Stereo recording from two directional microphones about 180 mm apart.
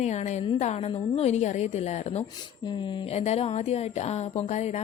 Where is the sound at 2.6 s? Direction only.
25° left (ahead or behind).